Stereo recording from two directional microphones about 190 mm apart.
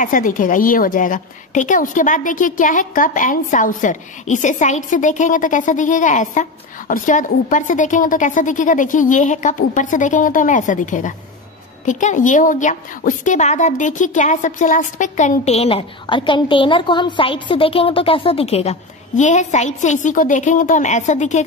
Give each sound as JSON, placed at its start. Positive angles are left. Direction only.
{"t": 0.0, "sound": "a woman's voice", "side_deg": 45}